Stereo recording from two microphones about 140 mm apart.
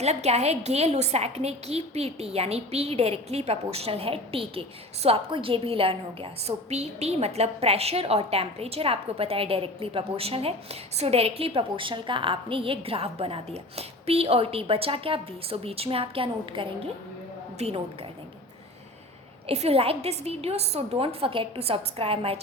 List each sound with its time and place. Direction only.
0.0 s a woman's voice: 50° right (ahead or behind)
6.7 s a woman's voice: 50° right (ahead or behind)
19.5 s a woman's voice: 45° right (ahead or behind)